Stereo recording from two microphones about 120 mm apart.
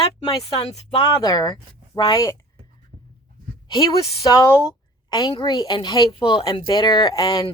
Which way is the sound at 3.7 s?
35° left (ahead or behind).